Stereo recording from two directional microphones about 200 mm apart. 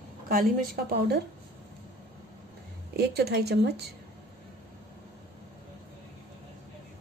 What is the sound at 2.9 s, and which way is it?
A woman's voice, 55° right (ahead or behind).